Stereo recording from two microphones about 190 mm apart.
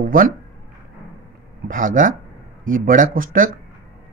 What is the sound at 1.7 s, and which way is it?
Speech, 45° right (ahead or behind).